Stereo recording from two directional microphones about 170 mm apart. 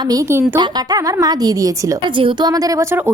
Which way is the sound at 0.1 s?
15° right (ahead or behind).